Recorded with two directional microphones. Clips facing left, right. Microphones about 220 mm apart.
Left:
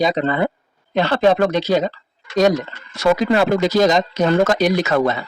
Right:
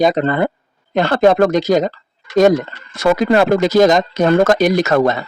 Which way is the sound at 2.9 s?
50° right (ahead or behind).